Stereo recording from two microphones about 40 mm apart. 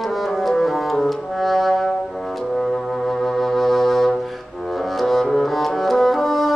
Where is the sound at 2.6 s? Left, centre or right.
Centre.